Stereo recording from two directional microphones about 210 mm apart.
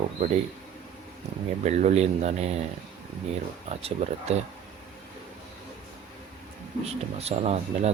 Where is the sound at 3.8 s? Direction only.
30° right (ahead or behind).